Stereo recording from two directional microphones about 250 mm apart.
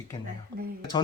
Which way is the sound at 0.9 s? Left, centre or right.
Centre.